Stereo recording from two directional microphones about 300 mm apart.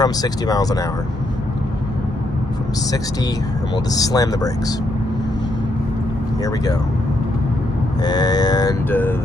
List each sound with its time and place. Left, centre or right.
0.0 s mantra: centre
3.9 s mantra: centre
8.0 s mantra: centre